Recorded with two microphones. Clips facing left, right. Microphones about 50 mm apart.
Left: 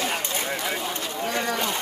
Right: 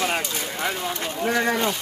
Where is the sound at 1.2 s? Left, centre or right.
Right.